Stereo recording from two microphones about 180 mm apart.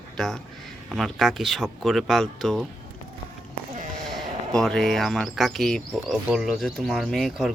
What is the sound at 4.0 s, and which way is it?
Speech, centre (ahead or behind).